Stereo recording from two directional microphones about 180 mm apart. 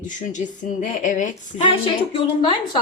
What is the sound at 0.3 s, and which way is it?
Speech, 45° left (ahead or behind).